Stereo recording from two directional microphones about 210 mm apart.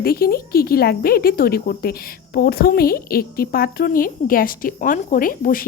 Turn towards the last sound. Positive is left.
turn(degrees=40)  # may be behind; listen again after turning